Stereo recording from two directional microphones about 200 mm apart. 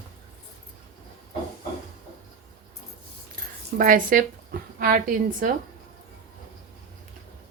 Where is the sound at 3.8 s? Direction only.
45° right (ahead or behind).